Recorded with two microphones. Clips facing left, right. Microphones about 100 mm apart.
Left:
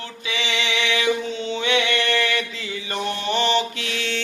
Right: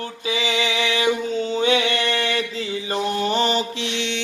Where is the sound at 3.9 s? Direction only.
20° right (ahead or behind).